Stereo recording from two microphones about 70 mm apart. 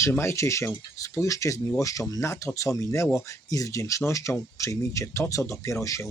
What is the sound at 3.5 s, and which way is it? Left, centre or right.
Speech, left.